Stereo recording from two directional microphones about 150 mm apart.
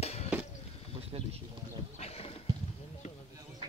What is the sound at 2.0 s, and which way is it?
Horse, 40° left (ahead or behind).